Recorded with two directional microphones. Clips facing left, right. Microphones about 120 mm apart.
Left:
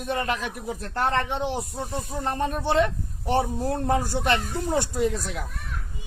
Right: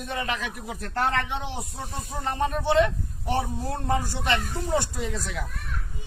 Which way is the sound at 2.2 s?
45° left (ahead or behind).